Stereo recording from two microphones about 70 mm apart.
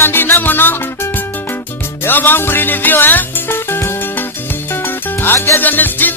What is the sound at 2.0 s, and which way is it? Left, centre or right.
Music, left.